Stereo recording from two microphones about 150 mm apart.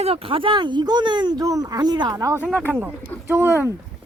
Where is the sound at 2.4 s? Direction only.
10° left (ahead or behind).